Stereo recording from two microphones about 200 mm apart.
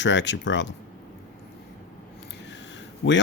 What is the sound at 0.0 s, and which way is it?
Speech, 65° left (ahead or behind).